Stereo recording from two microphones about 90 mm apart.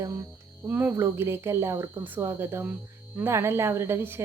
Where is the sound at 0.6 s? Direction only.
20° right (ahead or behind).